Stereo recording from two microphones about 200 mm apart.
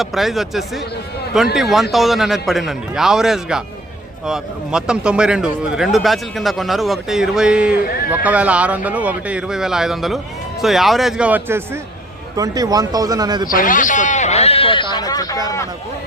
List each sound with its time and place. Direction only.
0.0 s speech: centre (ahead or behind); by 13.5 s 20° right (ahead or behind)
13.5 s speech: 45° left (ahead or behind); by 15.4 s 20° left (ahead or behind)